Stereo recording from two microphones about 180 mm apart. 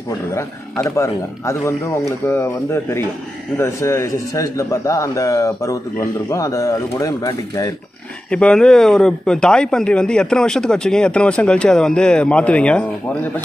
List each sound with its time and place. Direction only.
0.8 s a man's voice: 15° left (ahead or behind)
8.3 s a man's voice: 5° left (ahead or behind)